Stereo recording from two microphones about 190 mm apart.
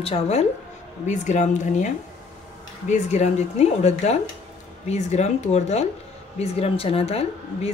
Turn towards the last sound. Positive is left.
turn(degrees=35)  # may be behind; listen again after turning